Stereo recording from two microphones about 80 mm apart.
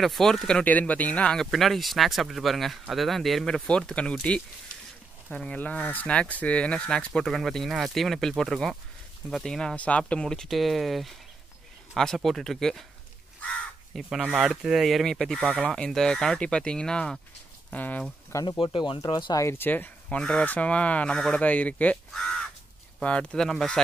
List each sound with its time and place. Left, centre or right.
0.0 s speech: centre
1.4 s speech: centre
13.9 s speech: centre
17.7 s speech: left
18.6 s speech: left
18.9 s speech: left
19.3 s speech: left
20.2 s speech: centre
22.2 s crow: centre
23.0 s speech: centre